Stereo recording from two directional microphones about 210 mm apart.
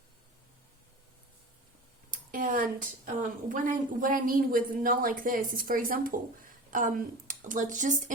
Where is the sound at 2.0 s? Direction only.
40° right (ahead or behind).